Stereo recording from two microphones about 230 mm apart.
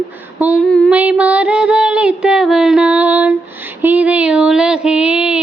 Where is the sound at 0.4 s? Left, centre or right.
Centre.